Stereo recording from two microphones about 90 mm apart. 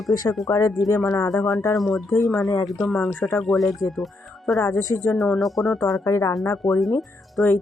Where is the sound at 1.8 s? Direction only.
Centre (ahead or behind).